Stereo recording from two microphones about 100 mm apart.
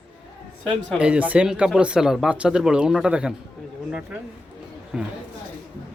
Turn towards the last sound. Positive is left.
turn(degrees=-5)  # may be behind; listen again after turning